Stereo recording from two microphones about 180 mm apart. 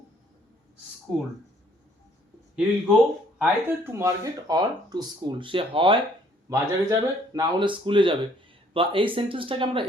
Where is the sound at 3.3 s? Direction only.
10° right (ahead or behind).